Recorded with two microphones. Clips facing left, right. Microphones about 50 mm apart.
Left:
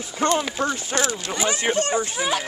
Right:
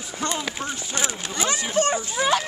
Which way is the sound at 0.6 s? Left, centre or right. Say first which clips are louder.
Left 7 dB; left.